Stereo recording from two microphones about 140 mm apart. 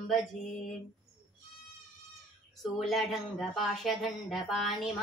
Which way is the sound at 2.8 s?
Centre (ahead or behind).